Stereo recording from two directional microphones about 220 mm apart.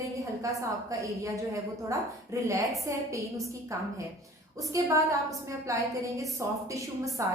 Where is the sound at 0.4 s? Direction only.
15° right (ahead or behind).